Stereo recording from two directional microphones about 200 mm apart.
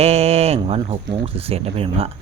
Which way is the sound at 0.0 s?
30° right (ahead or behind).